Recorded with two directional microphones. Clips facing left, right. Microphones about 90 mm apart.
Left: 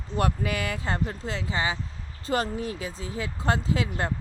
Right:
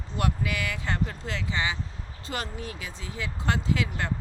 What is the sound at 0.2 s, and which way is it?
Speech, 35° left (ahead or behind).